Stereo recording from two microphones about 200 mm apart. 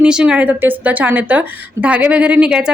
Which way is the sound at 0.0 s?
5° right (ahead or behind).